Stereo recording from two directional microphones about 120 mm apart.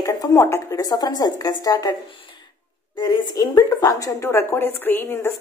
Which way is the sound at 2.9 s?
35° left (ahead or behind).